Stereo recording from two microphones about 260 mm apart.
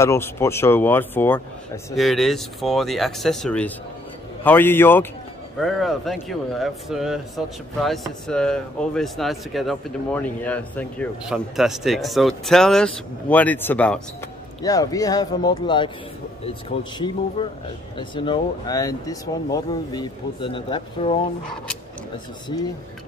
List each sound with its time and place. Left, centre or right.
0.0 s speech: centre
17.4 s speech: centre